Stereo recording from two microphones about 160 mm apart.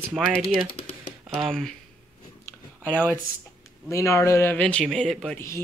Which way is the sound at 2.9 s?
10° left (ahead or behind).